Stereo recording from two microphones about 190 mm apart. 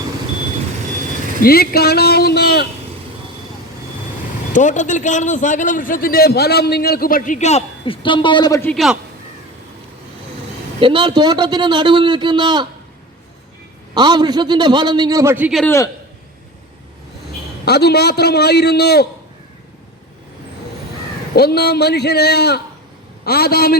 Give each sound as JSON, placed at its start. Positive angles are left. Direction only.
{"t": 1.4, "sound": "a man's voice", "side_deg": 55}
{"t": 4.5, "sound": "a man's voice", "side_deg": 40}
{"t": 8.7, "sound": "a man's voice", "side_deg": 0}
{"t": 10.8, "sound": "a man's voice", "side_deg": -25}
{"t": 13.9, "sound": "a man's voice", "side_deg": -25}
{"t": 15.6, "sound": "a man's voice", "side_deg": 15}
{"t": 17.7, "sound": "a man's voice", "side_deg": 60}
{"t": 21.3, "sound": "a man's voice", "side_deg": 55}